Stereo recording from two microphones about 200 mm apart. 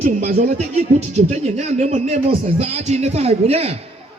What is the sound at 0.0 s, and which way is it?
Speech, 35° right (ahead or behind).